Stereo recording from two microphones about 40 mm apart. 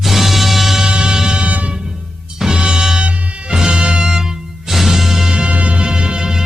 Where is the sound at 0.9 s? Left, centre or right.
Right.